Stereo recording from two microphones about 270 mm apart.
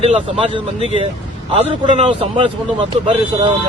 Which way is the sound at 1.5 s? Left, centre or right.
Centre.